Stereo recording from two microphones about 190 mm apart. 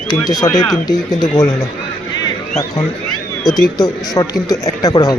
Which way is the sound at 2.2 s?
20° left (ahead or behind).